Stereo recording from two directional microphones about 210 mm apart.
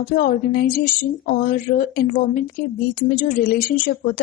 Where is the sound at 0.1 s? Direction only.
45° left (ahead or behind).